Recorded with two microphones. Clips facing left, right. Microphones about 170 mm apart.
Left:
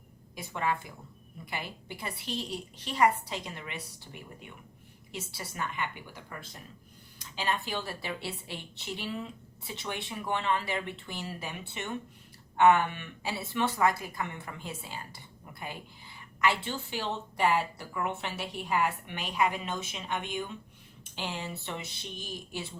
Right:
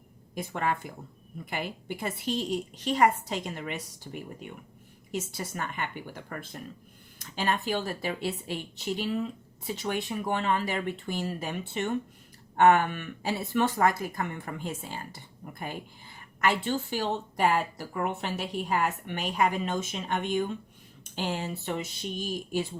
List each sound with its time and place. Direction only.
0.3 s speech: 50° right (ahead or behind)